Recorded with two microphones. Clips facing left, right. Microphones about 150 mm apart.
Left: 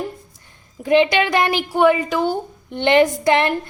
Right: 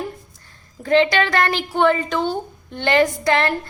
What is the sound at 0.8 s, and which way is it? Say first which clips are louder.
A woman's voice: left 1 dB; 15° left (ahead or behind).